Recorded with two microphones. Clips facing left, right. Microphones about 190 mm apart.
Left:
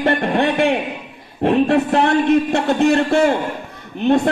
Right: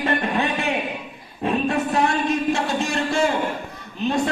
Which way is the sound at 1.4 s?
65° left (ahead or behind).